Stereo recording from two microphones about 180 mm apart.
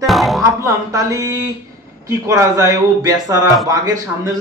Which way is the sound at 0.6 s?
20° right (ahead or behind).